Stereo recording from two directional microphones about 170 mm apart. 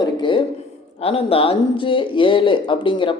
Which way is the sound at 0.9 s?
35° left (ahead or behind).